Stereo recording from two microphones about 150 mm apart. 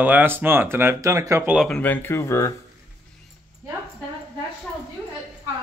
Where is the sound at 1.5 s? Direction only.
Centre (ahead or behind).